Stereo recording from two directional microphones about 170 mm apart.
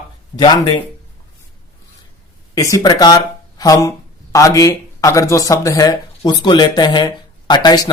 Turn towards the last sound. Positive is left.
turn(degrees=25)  # may be behind; listen again after turning